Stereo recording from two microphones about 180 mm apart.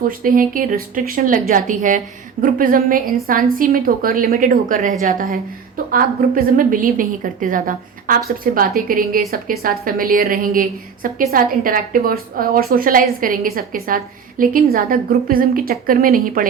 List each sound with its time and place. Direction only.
0.1 s a woman's voice: 50° right (ahead or behind)